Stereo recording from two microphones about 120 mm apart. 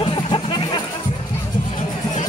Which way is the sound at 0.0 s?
45° left (ahead or behind).